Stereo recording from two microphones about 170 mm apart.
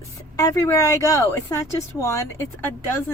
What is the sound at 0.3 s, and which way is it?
Speech, 20° left (ahead or behind).